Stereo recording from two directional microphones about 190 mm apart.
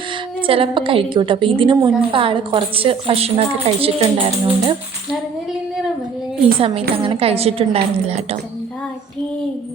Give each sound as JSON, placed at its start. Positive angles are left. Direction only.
{"t": 0.4, "sound": "a woman's voice", "side_deg": -30}
{"t": 6.6, "sound": "a woman's voice", "side_deg": -30}